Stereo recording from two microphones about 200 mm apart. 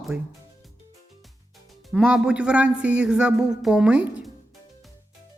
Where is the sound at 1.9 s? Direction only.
5° right (ahead or behind).